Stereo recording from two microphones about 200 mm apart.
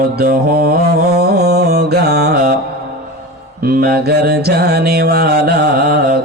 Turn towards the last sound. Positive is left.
turn(degrees=-50)  # may be behind; listen again after turning